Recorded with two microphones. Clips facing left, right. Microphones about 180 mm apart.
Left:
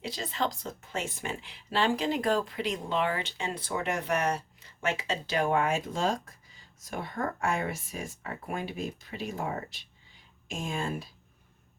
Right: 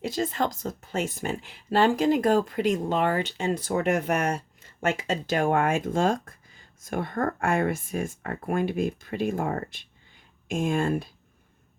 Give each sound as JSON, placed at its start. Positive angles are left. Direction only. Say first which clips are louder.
{"t": 0.0, "sound": "speech", "louder": "right 6 dB", "side_deg": -45}